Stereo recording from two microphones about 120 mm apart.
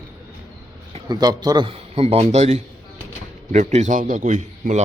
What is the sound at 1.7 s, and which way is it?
A man's voice, 55° right (ahead or behind).